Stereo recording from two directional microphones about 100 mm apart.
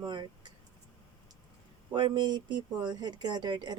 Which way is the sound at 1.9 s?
50° right (ahead or behind).